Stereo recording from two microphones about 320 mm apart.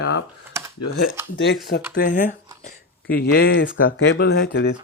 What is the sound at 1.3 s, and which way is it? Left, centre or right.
Speech, left.